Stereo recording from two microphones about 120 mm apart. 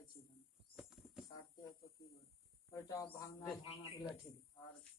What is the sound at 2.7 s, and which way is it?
Speech, 30° left (ahead or behind).